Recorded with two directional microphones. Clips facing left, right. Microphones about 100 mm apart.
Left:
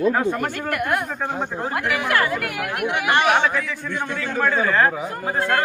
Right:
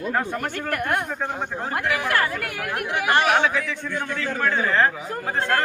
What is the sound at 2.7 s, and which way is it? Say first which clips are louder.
Speech: left 1 dB; 40° right (ahead or behind).